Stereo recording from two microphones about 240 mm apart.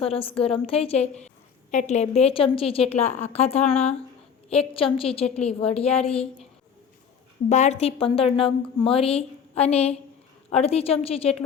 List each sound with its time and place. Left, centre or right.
0.0 s a woman's voice: left
7.5 s a woman's voice: left